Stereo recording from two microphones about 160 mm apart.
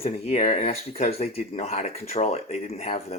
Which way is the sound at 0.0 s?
45° left (ahead or behind).